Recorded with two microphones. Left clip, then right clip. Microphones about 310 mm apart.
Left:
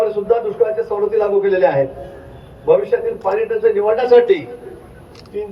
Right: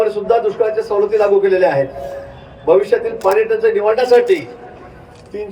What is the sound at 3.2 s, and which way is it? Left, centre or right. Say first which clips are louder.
A man's voice: right 4 dB; right.